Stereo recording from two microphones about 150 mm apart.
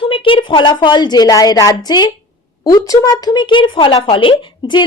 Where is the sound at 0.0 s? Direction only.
35° left (ahead or behind).